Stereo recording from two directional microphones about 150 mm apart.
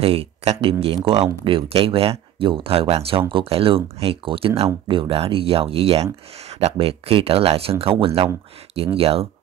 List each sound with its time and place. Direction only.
0.0 s speech: 40° right (ahead or behind)